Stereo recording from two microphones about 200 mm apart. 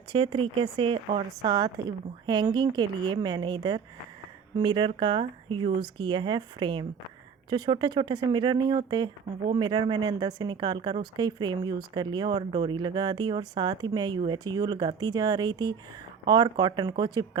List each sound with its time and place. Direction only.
0.1 s speech: 25° right (ahead or behind)